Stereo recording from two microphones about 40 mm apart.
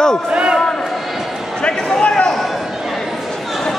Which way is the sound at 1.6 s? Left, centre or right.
Left.